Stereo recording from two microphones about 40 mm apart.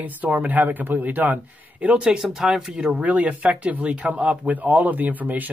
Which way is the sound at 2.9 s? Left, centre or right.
Right.